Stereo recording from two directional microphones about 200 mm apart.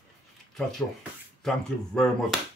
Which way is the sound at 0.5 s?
Centre (ahead or behind).